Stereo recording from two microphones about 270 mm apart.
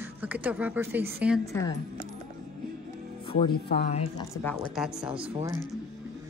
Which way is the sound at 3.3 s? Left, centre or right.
Centre.